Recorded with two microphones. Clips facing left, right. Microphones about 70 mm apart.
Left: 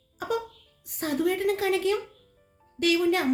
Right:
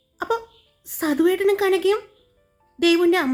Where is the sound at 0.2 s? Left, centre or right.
Right.